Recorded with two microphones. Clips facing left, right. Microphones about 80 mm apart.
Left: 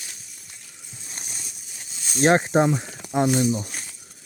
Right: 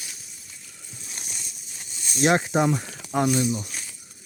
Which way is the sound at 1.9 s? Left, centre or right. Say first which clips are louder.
Left 3 dB; left.